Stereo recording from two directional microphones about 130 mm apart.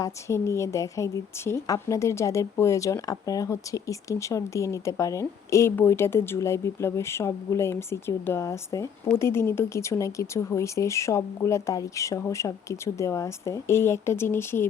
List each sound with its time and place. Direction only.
0.0 s a woman's voice: 20° left (ahead or behind)